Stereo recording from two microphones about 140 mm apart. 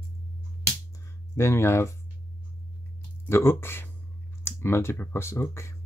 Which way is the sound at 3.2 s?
20° left (ahead or behind).